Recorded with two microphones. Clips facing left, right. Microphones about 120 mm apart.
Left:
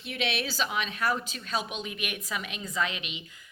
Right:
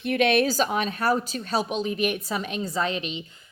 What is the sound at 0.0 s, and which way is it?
A woman's voice, 50° right (ahead or behind).